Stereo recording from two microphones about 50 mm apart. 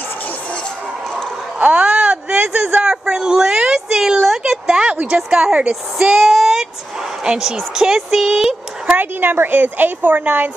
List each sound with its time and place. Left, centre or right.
1.6 s a sound: right
5.0 s a woman's voice: centre
8.9 s a woman's voice: right